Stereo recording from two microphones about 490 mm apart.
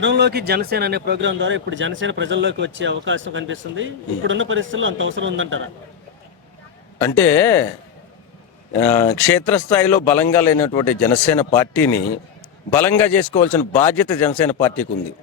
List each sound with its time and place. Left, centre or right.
0.0 s speech: right
7.2 s speech: centre
8.7 s speech: centre